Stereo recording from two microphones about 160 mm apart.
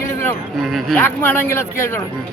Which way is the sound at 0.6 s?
Centre (ahead or behind).